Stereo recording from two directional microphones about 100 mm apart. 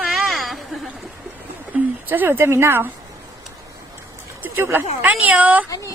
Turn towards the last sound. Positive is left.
turn(degrees=-15)  # may be behind; listen again after turning